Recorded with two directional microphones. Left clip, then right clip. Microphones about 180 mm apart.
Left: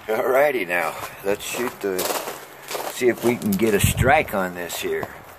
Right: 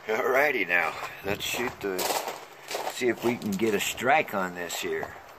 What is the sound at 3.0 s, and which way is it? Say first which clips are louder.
Speech: left 8 dB; 10° left (ahead or behind).